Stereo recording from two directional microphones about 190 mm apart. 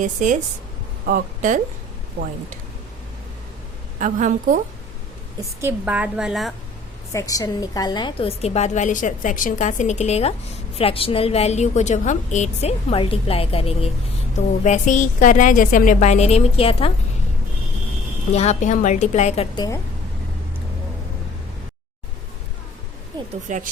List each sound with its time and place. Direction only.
0.0 s a woman's voice: 40° right (ahead or behind)
4.0 s a woman's voice: 40° right (ahead or behind)
5.4 s a woman's voice: 15° right (ahead or behind)
7.1 s a woman's voice: 15° left (ahead or behind)
18.3 s a woman's voice: 40° left (ahead or behind)
19.5 s a woman's voice: 20° left (ahead or behind)
23.5 s speech: 40° right (ahead or behind)